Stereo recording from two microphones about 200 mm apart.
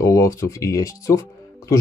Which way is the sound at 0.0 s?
15° left (ahead or behind).